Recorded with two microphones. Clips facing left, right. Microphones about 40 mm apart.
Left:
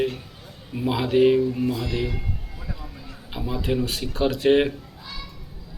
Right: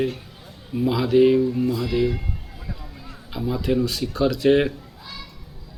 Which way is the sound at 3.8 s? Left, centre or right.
Left.